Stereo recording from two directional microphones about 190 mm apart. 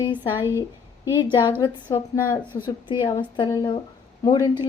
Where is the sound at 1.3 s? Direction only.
25° left (ahead or behind).